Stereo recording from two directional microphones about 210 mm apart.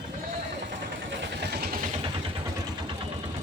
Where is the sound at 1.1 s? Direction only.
50° right (ahead or behind).